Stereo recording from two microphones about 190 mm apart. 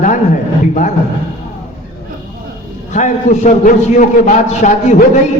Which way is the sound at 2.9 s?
40° left (ahead or behind).